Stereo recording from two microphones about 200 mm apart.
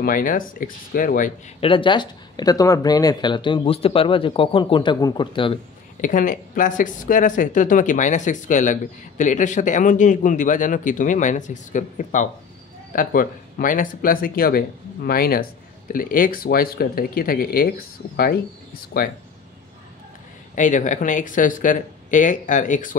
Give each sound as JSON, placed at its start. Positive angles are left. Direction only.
{"t": 0.0, "sound": "speech", "side_deg": 45}
{"t": 1.6, "sound": "speech", "side_deg": 25}
{"t": 5.9, "sound": "a man's voice", "side_deg": 40}
{"t": 20.5, "sound": "a man's voice", "side_deg": 40}